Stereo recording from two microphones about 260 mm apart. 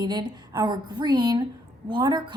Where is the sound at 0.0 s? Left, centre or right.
Centre.